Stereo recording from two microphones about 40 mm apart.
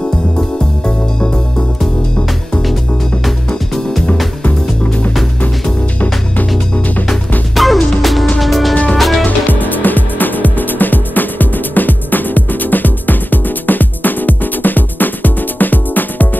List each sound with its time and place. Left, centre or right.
0.4 s music: left
4.5 s music: left
7.5 s music: centre
9.5 s music: left